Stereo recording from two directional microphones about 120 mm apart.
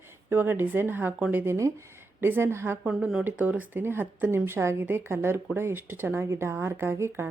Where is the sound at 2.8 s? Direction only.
5° right (ahead or behind).